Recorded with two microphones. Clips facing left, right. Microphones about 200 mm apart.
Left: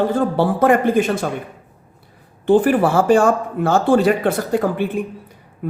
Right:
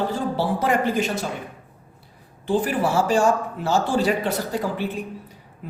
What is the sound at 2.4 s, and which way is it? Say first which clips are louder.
Speech: left 8 dB; 55° left (ahead or behind).